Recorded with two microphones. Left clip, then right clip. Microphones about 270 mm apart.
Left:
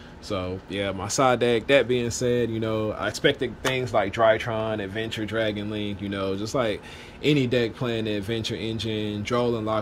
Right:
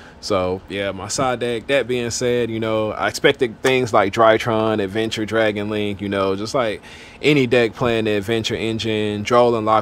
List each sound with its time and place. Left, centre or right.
0.3 s speech: centre
0.7 s speech: centre